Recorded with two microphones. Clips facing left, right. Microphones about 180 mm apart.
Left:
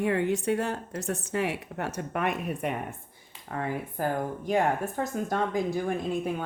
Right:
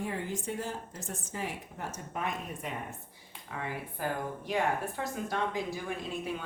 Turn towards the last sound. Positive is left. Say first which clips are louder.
# left 7 dB
turn(degrees=50)  # may be behind; listen again after turning